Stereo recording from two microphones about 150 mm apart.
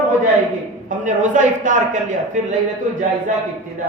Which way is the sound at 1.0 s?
55° right (ahead or behind).